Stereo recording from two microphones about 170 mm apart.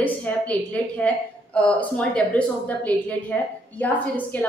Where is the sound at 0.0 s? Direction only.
10° left (ahead or behind).